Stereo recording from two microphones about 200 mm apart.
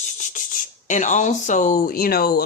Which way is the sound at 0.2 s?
40° left (ahead or behind).